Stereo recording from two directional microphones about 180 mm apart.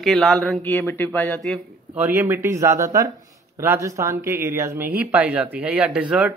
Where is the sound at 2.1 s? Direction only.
10° right (ahead or behind).